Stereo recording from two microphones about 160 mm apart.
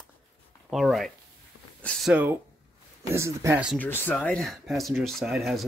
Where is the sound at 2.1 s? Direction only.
10° right (ahead or behind).